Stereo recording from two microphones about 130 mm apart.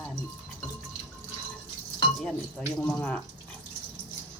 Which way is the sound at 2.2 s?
5° left (ahead or behind).